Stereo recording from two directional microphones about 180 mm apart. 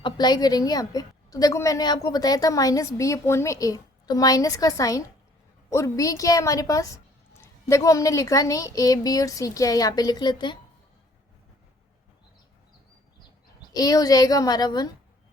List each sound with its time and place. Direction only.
0.0 s a woman's voice: 25° left (ahead or behind)
13.7 s a woman's voice: 20° left (ahead or behind)